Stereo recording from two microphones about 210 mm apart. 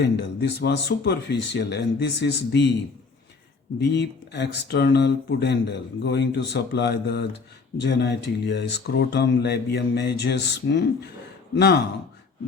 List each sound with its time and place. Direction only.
0.0 s speech: 50° left (ahead or behind)
3.8 s speech: 55° left (ahead or behind)